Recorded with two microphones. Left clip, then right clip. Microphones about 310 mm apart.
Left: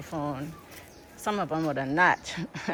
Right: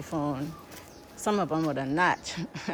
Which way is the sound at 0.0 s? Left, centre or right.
Centre.